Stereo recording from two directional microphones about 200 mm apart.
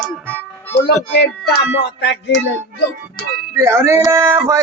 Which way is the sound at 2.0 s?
60° left (ahead or behind).